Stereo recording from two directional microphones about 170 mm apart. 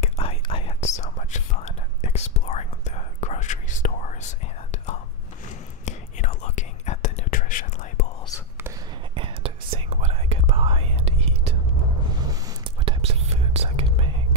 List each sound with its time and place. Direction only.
0.0 s whispering: 35° left (ahead or behind)
5.9 s whispering: 45° left (ahead or behind)
9.1 s whispering: 30° right (ahead or behind)
12.8 s whispering: 35° right (ahead or behind)